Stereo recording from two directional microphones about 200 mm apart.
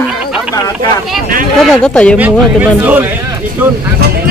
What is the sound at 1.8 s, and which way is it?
Speech, 5° left (ahead or behind).